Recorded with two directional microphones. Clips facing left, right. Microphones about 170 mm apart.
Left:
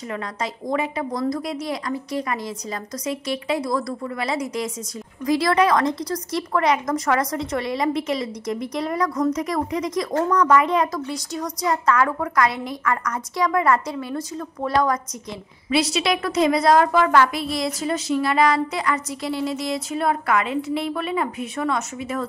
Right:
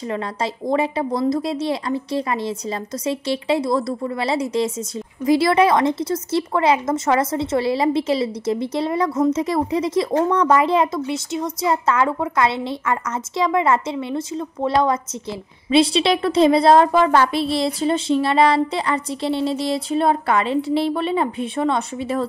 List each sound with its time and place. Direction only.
0.1 s a woman's voice: 30° right (ahead or behind)